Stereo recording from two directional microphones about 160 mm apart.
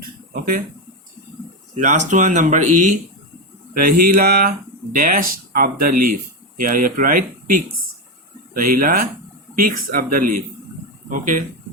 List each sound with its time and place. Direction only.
1.7 s speech: 50° right (ahead or behind)
3.8 s speech: 65° right (ahead or behind)
8.5 s speech: 60° right (ahead or behind)